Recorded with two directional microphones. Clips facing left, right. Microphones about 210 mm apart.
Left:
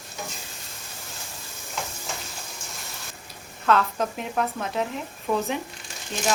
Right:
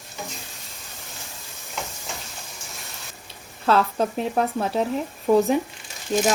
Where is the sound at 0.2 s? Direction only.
Centre (ahead or behind).